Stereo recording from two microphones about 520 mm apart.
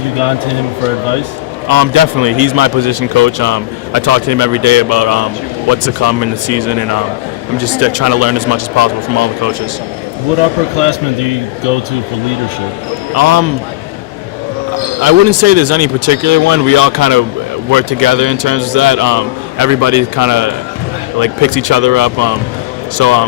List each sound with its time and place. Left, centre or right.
1.6 s a man's voice: right
13.1 s speech: right
15.0 s a man's voice: right